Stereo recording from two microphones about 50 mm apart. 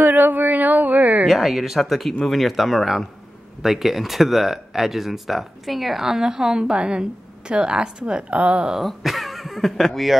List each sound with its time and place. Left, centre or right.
0.0 s a sound: right
1.2 s a woman's voice: centre; by 8.6 s right
8.7 s speech: centre